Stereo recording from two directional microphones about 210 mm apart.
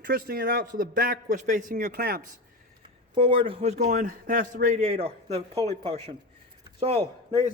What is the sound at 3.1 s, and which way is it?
A man's voice, 25° right (ahead or behind).